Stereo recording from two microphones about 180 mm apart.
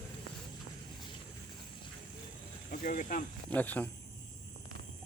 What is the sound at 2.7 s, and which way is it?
Speech, 50° left (ahead or behind).